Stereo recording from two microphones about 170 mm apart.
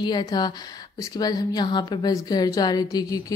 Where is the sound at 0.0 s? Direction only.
25° left (ahead or behind).